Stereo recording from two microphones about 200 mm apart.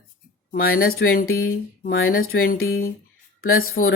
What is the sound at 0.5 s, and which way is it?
Speech, 45° left (ahead or behind).